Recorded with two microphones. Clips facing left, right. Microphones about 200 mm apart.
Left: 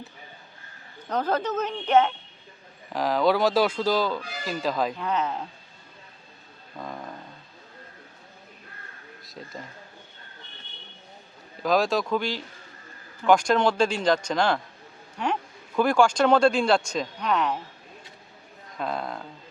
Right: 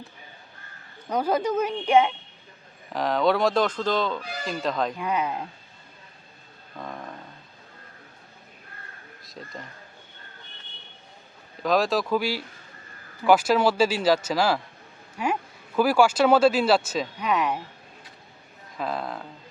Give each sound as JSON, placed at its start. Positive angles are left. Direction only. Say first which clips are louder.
{"t": 1.0, "sound": "a woman's voice", "louder": "right 2 dB", "side_deg": -10}
{"t": 2.9, "sound": "speech", "louder": "even", "side_deg": 0}
{"t": 4.9, "sound": "a woman's voice", "louder": "even", "side_deg": -10}
{"t": 6.7, "sound": "a sound", "louder": "even", "side_deg": 0}
{"t": 9.2, "sound": "speech", "louder": "even", "side_deg": 0}
{"t": 11.6, "sound": "speech", "louder": "even", "side_deg": 0}
{"t": 18.8, "sound": "speech", "louder": "even", "side_deg": 0}